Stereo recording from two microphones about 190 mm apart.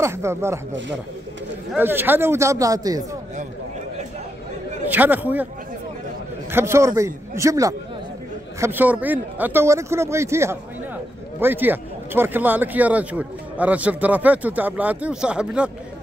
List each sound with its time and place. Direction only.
0.0 s speech: 15° right (ahead or behind)
1.7 s speech: 10° right (ahead or behind)
4.8 s speech: 10° right (ahead or behind)
6.5 s speech: 15° right (ahead or behind)